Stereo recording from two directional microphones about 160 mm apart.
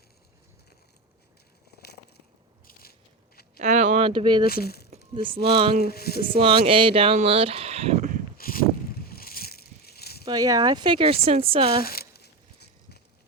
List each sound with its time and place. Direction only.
1.8 s biting: 85° left
3.6 s a sound: 50° right (ahead or behind)
4.0 s speech: 30° right (ahead or behind)
4.4 s speech: 75° left (ahead or behind)
5.1 s speech: 30° right (ahead or behind)
5.8 s speech: 75° left (ahead or behind)
6.2 s speech: 35° right (ahead or behind)
8.4 s a sound: 65° left (ahead or behind)
10.2 s speech: 25° right (ahead or behind)
11.8 s a sound: 70° left (ahead or behind); by 13.0 s 90° left